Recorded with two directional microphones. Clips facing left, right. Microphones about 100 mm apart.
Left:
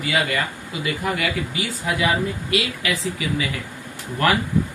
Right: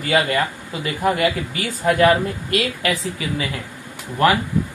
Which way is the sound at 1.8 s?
50° right (ahead or behind).